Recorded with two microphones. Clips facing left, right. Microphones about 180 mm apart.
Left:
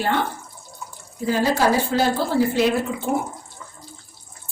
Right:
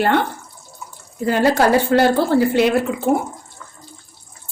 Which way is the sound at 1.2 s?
65° right (ahead or behind).